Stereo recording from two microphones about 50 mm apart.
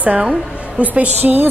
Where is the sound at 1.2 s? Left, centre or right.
Right.